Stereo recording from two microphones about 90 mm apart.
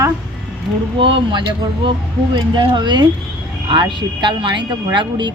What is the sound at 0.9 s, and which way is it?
A woman's voice, 70° right (ahead or behind).